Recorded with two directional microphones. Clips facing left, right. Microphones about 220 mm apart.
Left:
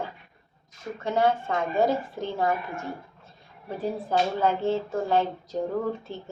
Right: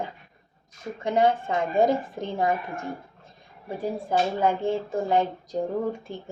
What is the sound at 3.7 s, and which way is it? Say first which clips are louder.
Speech: even; 10° right (ahead or behind).